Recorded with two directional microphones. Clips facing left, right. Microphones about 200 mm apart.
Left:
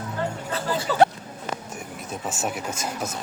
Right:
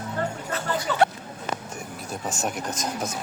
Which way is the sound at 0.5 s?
35° left (ahead or behind).